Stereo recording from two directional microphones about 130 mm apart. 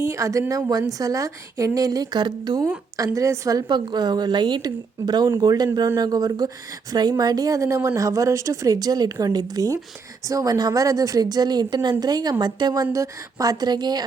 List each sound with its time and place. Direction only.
0.0 s a woman's voice: 20° right (ahead or behind)